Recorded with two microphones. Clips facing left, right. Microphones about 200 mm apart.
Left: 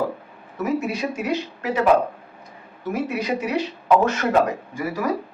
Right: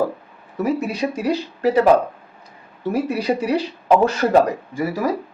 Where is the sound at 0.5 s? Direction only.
35° right (ahead or behind).